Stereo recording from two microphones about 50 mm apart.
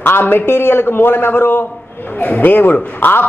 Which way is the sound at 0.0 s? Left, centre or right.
Left.